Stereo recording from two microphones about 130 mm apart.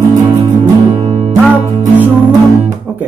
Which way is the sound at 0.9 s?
40° right (ahead or behind).